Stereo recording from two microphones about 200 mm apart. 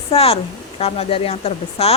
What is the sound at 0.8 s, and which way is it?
A woman's voice, 30° left (ahead or behind).